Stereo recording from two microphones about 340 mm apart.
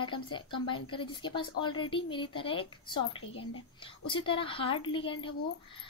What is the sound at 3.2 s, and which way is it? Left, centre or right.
Speech, left.